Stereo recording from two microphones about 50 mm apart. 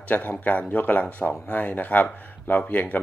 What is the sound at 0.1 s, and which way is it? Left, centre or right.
Speech, left.